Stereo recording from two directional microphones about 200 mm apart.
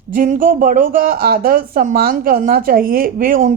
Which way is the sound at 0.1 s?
45° right (ahead or behind).